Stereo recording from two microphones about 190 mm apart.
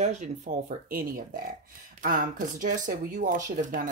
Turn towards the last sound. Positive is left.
turn(degrees=-45)  # may be behind; listen again after turning